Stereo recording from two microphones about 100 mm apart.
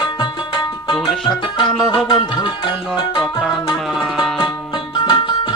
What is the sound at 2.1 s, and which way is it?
Music, 50° left (ahead or behind).